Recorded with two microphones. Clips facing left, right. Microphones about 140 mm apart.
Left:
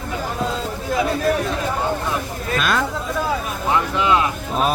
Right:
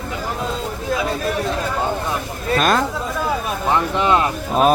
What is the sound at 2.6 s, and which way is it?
Speech, 40° right (ahead or behind).